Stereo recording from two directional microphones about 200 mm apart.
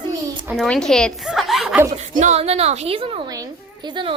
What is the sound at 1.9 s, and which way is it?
A woman's voice, 35° right (ahead or behind).